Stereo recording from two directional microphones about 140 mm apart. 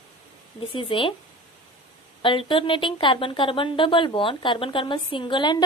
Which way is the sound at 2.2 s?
35° left (ahead or behind).